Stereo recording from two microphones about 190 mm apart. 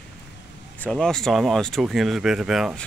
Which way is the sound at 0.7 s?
5° left (ahead or behind).